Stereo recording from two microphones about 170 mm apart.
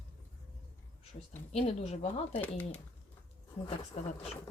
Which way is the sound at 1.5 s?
35° left (ahead or behind).